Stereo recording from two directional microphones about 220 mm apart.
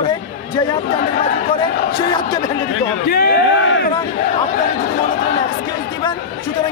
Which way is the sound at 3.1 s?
45° left (ahead or behind).